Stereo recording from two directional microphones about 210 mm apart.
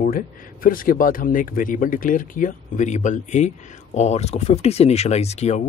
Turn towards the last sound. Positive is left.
turn(degrees=30)  # may be behind; listen again after turning